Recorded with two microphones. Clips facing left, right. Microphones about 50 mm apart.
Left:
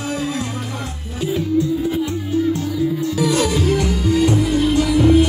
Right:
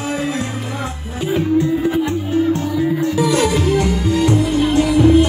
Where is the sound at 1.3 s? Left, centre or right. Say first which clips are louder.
Right 3 dB; right.